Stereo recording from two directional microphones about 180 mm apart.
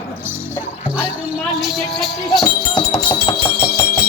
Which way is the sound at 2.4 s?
20° left (ahead or behind).